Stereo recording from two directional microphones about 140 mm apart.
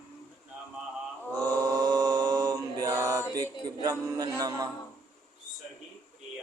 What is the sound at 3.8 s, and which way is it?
Speech, 25° right (ahead or behind).